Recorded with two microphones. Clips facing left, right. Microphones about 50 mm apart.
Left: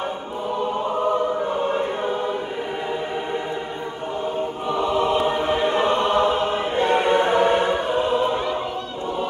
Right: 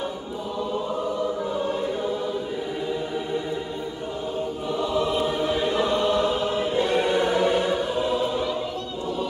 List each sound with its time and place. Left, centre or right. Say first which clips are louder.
1.6 s choir: left 3 dB; left
4.6 s choir: left 4 dB; left